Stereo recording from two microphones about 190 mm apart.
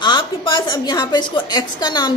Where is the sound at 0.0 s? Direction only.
25° left (ahead or behind).